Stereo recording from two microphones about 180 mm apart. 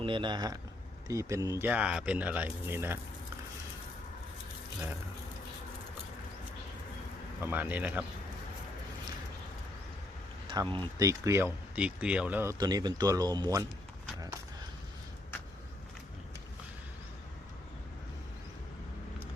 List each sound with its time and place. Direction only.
0.0 s speech: 25° right (ahead or behind)
7.4 s speech: 10° right (ahead or behind)
10.5 s speech: 25° right (ahead or behind)